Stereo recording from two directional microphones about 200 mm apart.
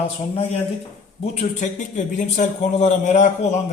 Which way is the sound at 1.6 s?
35° left (ahead or behind).